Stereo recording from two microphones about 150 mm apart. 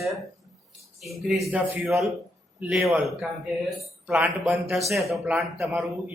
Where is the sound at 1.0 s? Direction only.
Centre (ahead or behind).